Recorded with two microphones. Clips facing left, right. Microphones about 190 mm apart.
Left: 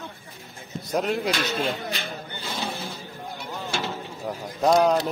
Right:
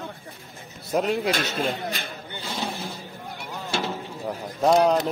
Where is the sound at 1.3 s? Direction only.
45° right (ahead or behind).